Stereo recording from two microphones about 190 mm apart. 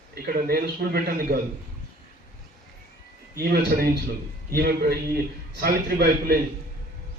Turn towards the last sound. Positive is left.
turn(degrees=-55)  # may be behind; listen again after turning